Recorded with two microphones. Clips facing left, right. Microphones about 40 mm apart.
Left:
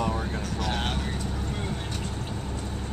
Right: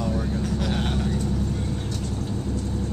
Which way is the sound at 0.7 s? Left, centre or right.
Left.